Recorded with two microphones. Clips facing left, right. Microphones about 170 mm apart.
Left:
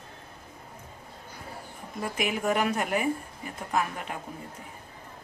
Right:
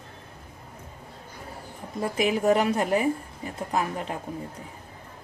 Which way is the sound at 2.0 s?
35° right (ahead or behind).